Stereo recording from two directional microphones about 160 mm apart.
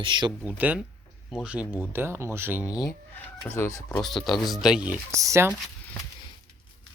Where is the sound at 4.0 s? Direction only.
Centre (ahead or behind).